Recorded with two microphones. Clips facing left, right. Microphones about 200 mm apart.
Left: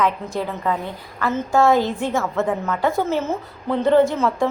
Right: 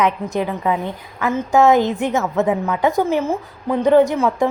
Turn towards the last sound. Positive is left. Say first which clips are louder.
# right 2 dB
turn(degrees=-15)  # may be behind; listen again after turning